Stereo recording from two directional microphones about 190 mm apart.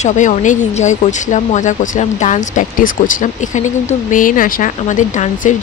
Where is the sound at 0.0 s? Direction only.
40° left (ahead or behind).